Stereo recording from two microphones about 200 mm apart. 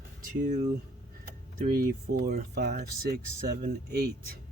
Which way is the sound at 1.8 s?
50° right (ahead or behind).